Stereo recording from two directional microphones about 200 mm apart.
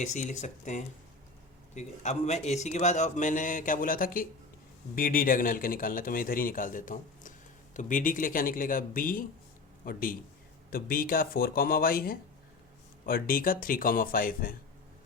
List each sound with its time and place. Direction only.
0.0 s a man's voice: 35° left (ahead or behind)